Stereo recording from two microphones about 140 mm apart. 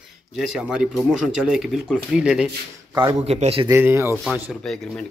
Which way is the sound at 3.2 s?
45° right (ahead or behind).